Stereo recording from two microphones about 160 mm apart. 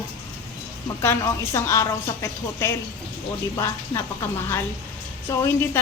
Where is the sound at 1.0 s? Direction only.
15° left (ahead or behind).